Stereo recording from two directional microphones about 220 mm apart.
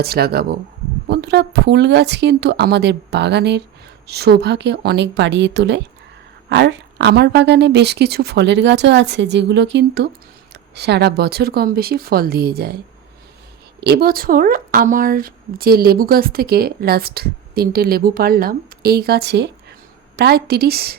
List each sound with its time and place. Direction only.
0.0 s speech: 45° right (ahead or behind)
13.8 s speech: 45° right (ahead or behind)